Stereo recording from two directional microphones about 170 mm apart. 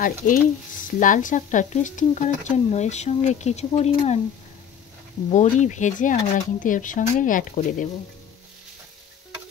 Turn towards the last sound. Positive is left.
turn(degrees=50)  # may be behind; listen again after turning